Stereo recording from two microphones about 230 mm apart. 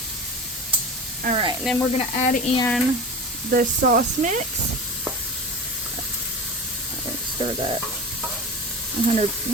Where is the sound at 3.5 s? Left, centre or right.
Right.